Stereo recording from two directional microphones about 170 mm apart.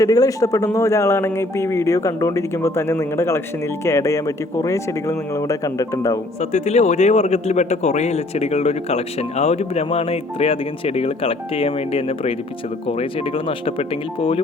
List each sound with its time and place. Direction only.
0.0 s speech: 20° left (ahead or behind)
6.4 s a man's voice: 40° left (ahead or behind)